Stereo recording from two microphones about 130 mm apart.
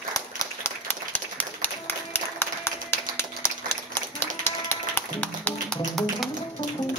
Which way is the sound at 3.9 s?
20° left (ahead or behind).